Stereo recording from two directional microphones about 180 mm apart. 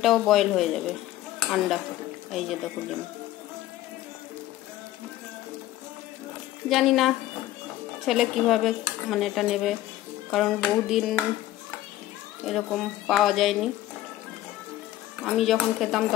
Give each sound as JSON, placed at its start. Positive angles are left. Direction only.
{"t": 0.0, "sound": "cutlery", "side_deg": 0}
{"t": 2.3, "sound": "cutlery", "side_deg": 0}
{"t": 6.7, "sound": "cutlery", "side_deg": 0}
{"t": 12.4, "sound": "cutlery", "side_deg": 0}
{"t": 15.2, "sound": "cutlery", "side_deg": 0}